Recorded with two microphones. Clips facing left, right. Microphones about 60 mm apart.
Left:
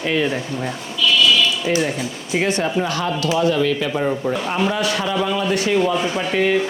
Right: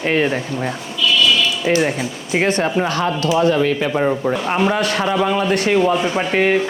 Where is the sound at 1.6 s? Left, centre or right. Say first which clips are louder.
Right 3 dB; right.